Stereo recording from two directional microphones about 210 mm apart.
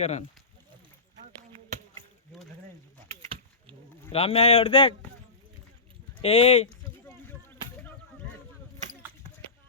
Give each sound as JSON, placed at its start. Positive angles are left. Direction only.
{"t": 0.0, "sound": "speech", "side_deg": 35}
{"t": 3.1, "sound": "rowboat", "side_deg": -25}
{"t": 4.1, "sound": "speech", "side_deg": 25}
{"t": 6.2, "sound": "speech", "side_deg": 30}
{"t": 7.0, "sound": "a sound", "side_deg": 10}